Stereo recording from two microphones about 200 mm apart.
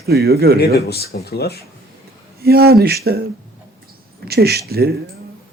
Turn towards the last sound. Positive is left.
turn(degrees=-50)  # may be behind; listen again after turning